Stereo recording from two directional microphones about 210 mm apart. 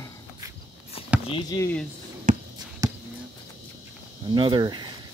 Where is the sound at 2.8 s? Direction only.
15° right (ahead or behind).